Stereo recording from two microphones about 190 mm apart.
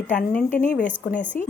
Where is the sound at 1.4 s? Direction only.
45° left (ahead or behind).